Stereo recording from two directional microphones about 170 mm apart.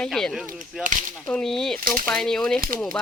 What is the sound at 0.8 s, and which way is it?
Speech, 50° right (ahead or behind).